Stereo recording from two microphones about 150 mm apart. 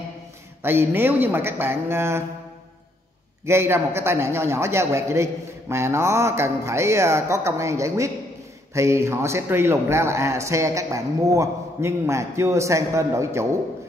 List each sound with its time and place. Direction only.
0.6 s a man's voice: 15° right (ahead or behind)
3.4 s a man's voice: 15° right (ahead or behind)